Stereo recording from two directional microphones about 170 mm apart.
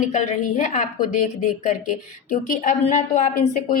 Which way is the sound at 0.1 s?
45° left (ahead or behind).